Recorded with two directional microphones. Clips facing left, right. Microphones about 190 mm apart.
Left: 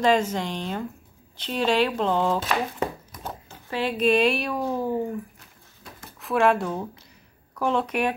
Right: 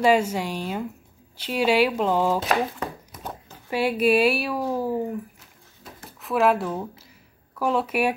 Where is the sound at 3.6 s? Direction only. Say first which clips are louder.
Right 2 dB; 10° right (ahead or behind).